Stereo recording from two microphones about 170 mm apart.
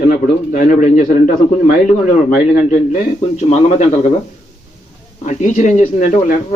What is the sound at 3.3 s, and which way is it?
Speech, 40° left (ahead or behind).